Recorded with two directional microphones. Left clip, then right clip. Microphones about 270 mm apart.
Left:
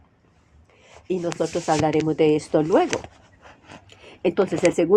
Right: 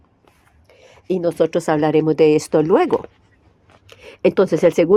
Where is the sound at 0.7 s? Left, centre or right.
Right.